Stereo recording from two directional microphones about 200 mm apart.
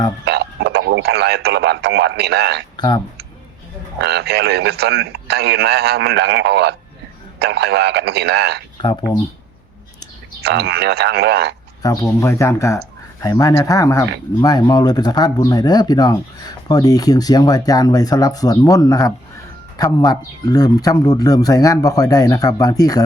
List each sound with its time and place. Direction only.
0.3 s speech: 55° right (ahead or behind)
2.7 s speech: 20° left (ahead or behind)
4.0 s speech: 55° right (ahead or behind)
8.8 s speech: 20° left (ahead or behind)
10.0 s speech: 55° right (ahead or behind)
11.8 s speech: 15° left (ahead or behind)